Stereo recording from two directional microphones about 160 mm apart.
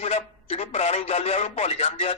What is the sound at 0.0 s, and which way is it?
A man's voice, 40° left (ahead or behind).